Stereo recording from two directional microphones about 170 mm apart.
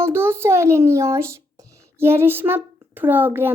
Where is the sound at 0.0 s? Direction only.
15° right (ahead or behind).